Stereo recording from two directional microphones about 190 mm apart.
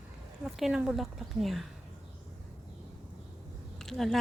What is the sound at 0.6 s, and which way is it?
Speech, 5° right (ahead or behind).